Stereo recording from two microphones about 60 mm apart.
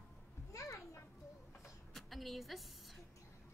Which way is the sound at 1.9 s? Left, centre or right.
Centre.